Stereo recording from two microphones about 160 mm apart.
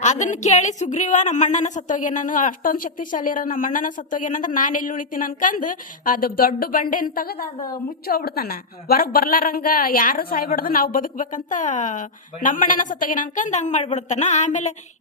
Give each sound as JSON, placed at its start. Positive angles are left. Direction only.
{"t": 0.0, "sound": "speech", "side_deg": 50}